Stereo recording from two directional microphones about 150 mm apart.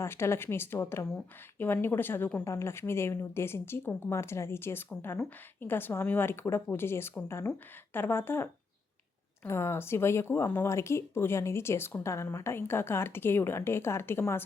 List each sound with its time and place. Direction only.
0.0 s speech: 15° left (ahead or behind)